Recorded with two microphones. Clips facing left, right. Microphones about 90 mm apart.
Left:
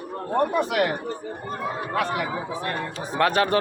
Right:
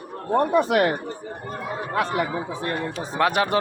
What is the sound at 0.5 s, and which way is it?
Speech, 35° right (ahead or behind).